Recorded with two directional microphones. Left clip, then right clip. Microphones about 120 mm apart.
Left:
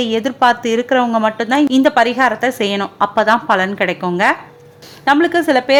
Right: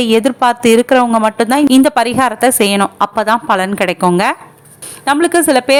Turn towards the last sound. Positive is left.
turn(degrees=-30)  # may be behind; listen again after turning